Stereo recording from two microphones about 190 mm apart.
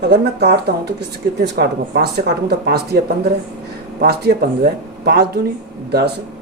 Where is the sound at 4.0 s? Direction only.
55° right (ahead or behind).